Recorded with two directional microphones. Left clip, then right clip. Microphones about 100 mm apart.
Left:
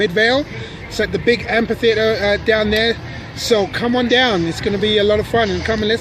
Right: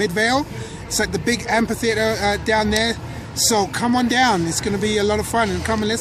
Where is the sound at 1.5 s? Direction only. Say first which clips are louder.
Left 4 dB; 45° right (ahead or behind).